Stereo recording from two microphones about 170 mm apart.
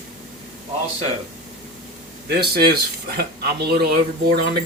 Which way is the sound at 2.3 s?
70° right (ahead or behind).